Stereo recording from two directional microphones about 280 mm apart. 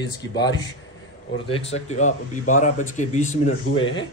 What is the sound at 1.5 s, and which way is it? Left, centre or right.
Speech, left.